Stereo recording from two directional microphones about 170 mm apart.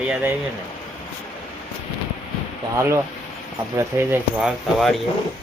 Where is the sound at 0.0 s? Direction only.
10° right (ahead or behind).